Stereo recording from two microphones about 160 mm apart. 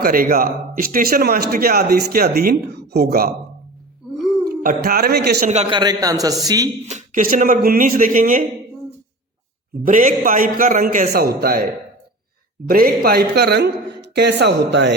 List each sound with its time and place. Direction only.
0.0 s speech: 65° right (ahead or behind)
4.4 s speech: 60° right (ahead or behind); by 5.4 s 90° right
5.7 s a man's voice: 25° right (ahead or behind)
6.8 s speech: 50° right (ahead or behind)
9.8 s speech: 55° right (ahead or behind)
11.1 s a man's voice: 75° right (ahead or behind)